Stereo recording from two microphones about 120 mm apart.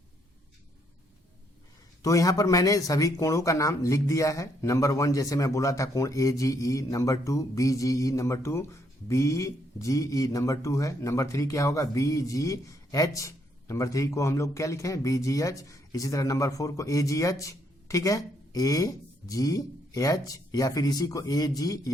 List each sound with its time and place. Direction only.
2.0 s speech: 30° left (ahead or behind)